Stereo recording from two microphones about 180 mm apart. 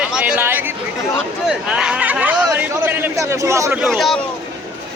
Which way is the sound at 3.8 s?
Centre (ahead or behind).